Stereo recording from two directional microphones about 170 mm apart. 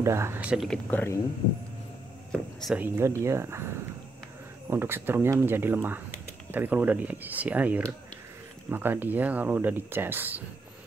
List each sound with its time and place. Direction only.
0.0 s speech: 15° right (ahead or behind)
0.8 s speech: 15° left (ahead or behind)
2.6 s speech: 5° right (ahead or behind)
3.0 s speech: 15° right (ahead or behind)